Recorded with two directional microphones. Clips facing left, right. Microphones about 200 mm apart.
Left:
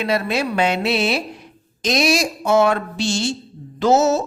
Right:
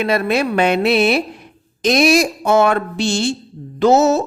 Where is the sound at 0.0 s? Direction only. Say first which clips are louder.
Right 4 dB; 55° right (ahead or behind).